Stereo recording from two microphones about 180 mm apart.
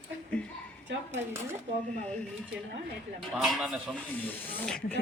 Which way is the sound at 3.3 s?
Centre (ahead or behind).